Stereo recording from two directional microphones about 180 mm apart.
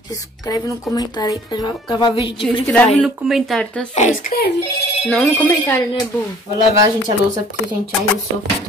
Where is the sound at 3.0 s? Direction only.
Centre (ahead or behind).